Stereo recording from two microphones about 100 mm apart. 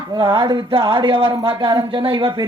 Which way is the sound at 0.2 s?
45° right (ahead or behind).